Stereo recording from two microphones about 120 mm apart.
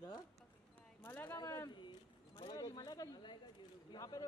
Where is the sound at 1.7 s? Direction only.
40° left (ahead or behind).